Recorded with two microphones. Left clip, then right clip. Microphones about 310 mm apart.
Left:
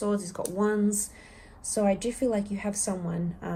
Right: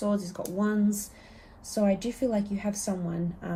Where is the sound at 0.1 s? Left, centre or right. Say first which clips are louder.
Left 1 dB; centre.